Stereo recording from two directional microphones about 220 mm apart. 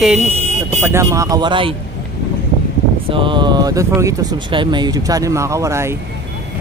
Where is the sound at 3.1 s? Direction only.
20° right (ahead or behind).